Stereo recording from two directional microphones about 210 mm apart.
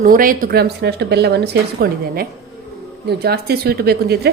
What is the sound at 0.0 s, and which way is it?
A woman's voice, 40° right (ahead or behind).